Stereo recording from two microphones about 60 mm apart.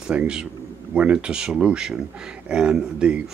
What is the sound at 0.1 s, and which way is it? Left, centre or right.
Speech, centre.